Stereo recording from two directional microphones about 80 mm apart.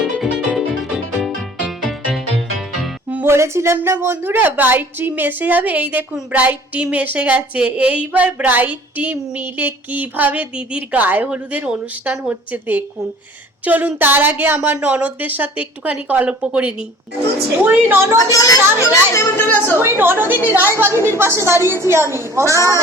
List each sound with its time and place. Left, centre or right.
0.0 s music: centre
3.2 s a woman's voice: right
18.3 s speech: left
19.5 s a woman's voice: left
19.8 s a woman's voice: right